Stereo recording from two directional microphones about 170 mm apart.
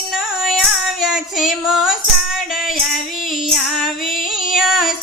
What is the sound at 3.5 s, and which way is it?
Female singing, centre (ahead or behind).